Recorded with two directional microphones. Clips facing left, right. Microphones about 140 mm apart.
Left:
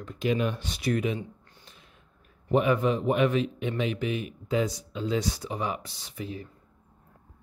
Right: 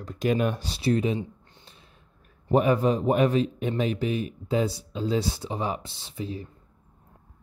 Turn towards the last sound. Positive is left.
turn(degrees=-30)  # may be behind; listen again after turning